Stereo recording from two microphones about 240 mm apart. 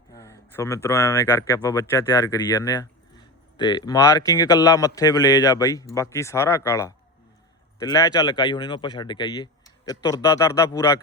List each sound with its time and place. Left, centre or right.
0.1 s a man's voice: centre